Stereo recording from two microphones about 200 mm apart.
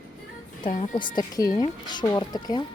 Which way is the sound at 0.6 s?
40° left (ahead or behind).